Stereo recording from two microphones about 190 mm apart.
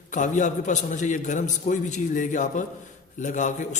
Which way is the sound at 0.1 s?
40° left (ahead or behind).